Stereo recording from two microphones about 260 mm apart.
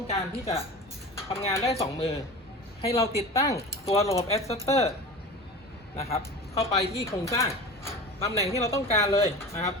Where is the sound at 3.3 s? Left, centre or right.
Centre.